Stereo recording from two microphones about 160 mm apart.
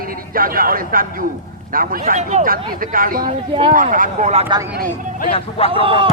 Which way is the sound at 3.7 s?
55° right (ahead or behind).